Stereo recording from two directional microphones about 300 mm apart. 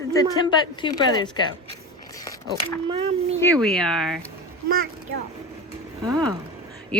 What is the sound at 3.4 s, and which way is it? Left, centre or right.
Speech, centre.